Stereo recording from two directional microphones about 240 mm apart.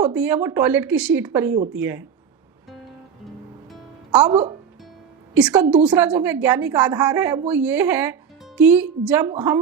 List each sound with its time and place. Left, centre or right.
0.0 s a woman's voice: centre
3.7 s music: centre
4.3 s speech: right
5.3 s a woman's voice: centre